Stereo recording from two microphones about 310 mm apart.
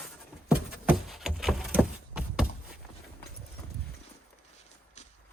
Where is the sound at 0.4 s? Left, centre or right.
Centre.